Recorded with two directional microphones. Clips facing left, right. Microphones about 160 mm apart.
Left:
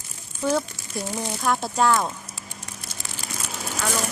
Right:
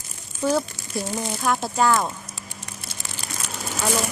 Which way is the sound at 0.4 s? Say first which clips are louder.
Right 1 dB; centre (ahead or behind).